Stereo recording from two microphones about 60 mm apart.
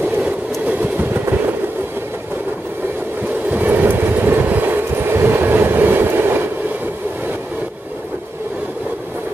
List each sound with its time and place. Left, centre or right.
0.2 s train: right
3.4 s train: right